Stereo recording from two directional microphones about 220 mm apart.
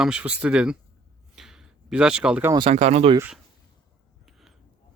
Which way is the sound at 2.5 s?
30° right (ahead or behind).